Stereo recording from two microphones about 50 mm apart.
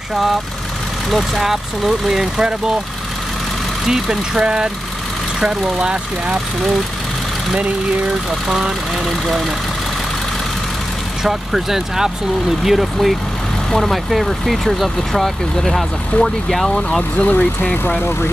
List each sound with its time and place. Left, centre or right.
0.1 s speech: centre
3.8 s speech: centre
8.5 s speech: centre
11.2 s speech: centre
17.2 s speech: left